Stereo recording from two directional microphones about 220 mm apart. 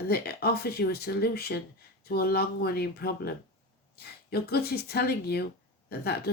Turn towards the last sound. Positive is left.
turn(degrees=45)  # may be behind; listen again after turning